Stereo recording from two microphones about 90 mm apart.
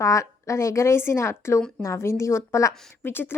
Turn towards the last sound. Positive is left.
turn(degrees=25)  # may be behind; listen again after turning